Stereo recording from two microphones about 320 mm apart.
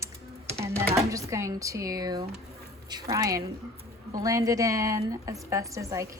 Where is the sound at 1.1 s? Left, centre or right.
Centre.